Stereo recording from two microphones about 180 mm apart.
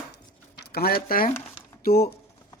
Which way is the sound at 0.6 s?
60° left (ahead or behind).